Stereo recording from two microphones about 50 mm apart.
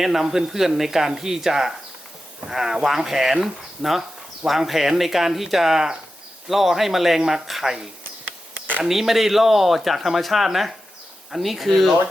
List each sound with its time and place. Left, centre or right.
0.0 s speech: centre